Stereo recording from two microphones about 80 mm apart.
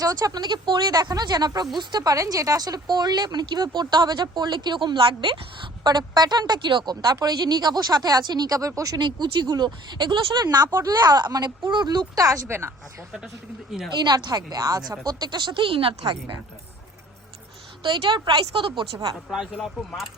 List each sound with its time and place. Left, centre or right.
0.0 s speech: right
5.8 s speech: right
7.0 s speech: right
9.0 s speech: right
12.1 s speech: right
12.5 s speech: right
14.0 s speech: right
17.9 s speech: right
19.3 s speech: centre